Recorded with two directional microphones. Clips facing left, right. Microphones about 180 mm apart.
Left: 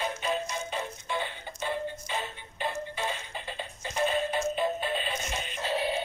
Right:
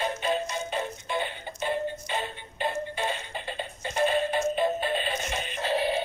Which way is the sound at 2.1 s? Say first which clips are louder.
Right 3 dB; 65° right (ahead or behind).